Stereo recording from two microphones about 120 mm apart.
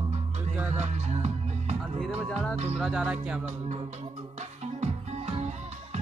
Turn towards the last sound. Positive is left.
turn(degrees=-65)  # may be behind; listen again after turning